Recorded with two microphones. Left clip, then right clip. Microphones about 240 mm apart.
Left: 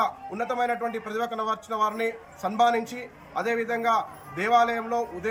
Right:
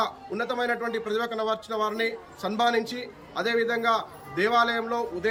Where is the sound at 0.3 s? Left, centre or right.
Centre.